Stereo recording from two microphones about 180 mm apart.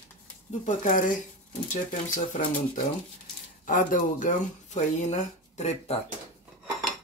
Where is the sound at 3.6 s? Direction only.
45° left (ahead or behind).